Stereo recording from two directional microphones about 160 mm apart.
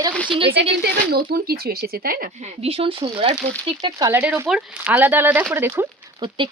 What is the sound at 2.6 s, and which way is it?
Speech, 35° right (ahead or behind).